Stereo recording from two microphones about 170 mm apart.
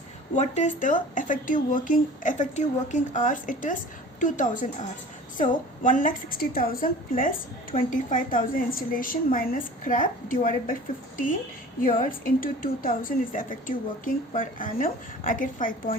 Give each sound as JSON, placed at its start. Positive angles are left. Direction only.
{"t": 0.3, "sound": "a woman's voice", "side_deg": 45}
{"t": 11.8, "sound": "a woman's voice", "side_deg": 55}